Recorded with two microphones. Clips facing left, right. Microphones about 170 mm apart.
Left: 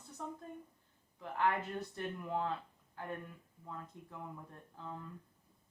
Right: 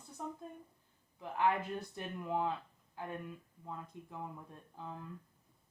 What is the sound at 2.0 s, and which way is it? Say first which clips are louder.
Speech: right 2 dB; 15° right (ahead or behind).